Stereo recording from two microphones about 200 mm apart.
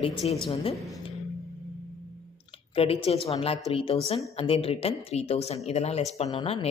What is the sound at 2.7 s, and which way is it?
A woman's voice, 30° left (ahead or behind).